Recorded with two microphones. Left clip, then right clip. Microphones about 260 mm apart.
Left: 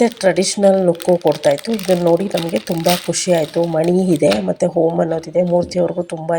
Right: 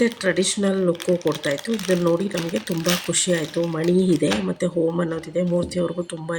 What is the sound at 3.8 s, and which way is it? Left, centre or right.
Speech, left.